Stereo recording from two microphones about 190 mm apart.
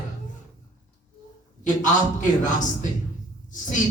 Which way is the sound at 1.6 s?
40° left (ahead or behind).